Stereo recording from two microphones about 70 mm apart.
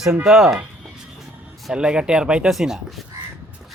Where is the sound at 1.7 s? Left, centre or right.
Centre.